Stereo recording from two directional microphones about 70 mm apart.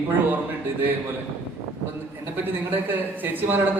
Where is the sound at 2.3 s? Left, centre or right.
Right.